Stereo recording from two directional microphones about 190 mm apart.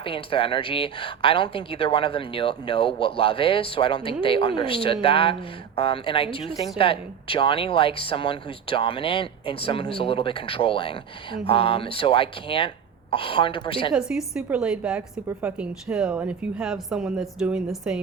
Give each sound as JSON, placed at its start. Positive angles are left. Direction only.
{"t": 0.0, "sound": "speech", "side_deg": 30}
{"t": 14.1, "sound": "a woman's voice", "side_deg": -5}